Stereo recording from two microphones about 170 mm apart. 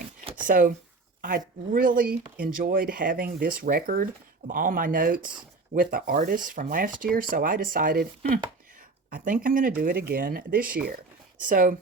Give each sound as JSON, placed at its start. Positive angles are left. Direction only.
{"t": 0.4, "sound": "speech", "side_deg": -55}